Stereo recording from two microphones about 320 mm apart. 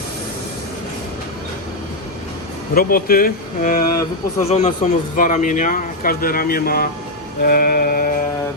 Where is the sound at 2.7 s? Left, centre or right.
Left.